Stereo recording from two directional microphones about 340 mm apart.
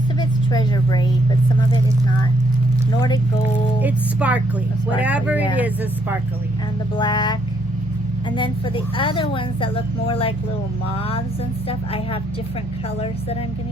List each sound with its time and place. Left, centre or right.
0.2 s speech: centre
3.0 s speech: centre
3.8 s speech: centre
6.9 s speech: centre
8.4 s speech: centre